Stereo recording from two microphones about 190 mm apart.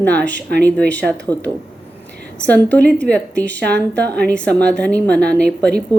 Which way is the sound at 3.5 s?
60° right (ahead or behind).